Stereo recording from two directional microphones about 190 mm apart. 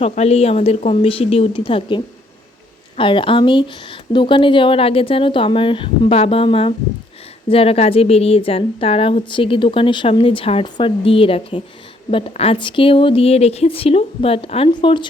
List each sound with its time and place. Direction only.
0.0 s a woman's voice: 35° left (ahead or behind)